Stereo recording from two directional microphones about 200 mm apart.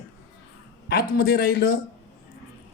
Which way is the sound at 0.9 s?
50° left (ahead or behind).